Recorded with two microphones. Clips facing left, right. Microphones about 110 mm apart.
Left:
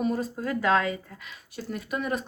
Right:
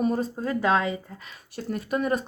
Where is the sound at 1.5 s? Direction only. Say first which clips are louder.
Right 4 dB; 45° right (ahead or behind).